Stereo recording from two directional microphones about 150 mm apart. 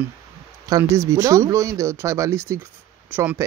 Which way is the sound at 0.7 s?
20° right (ahead or behind).